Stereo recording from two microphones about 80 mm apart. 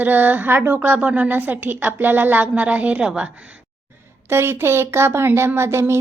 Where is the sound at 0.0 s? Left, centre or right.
Right.